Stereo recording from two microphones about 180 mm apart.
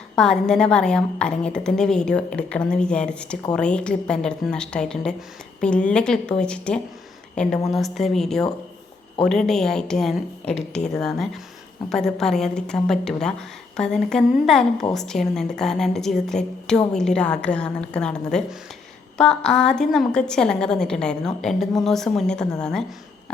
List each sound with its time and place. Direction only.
0.2 s a woman's voice: 5° left (ahead or behind)
10.5 s speech: 40° left (ahead or behind)
10.9 s a woman's voice: centre (ahead or behind)